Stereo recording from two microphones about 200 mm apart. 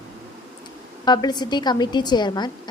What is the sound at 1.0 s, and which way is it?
A woman's voice, 20° left (ahead or behind).